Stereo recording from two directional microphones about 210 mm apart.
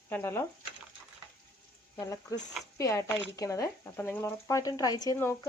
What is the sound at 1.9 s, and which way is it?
Speech, 15° left (ahead or behind).